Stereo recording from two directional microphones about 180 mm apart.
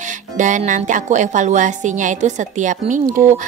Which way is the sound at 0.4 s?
45° right (ahead or behind).